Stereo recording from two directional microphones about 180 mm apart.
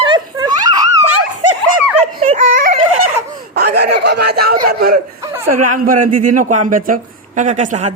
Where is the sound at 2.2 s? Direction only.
40° right (ahead or behind).